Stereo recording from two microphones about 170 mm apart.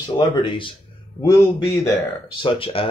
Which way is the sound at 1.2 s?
20° left (ahead or behind).